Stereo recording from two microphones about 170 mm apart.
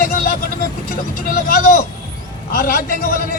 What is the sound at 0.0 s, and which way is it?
Vehicle, 55° left (ahead or behind).